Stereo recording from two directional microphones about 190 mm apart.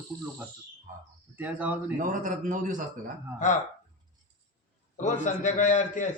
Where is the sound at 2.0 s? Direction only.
45° right (ahead or behind).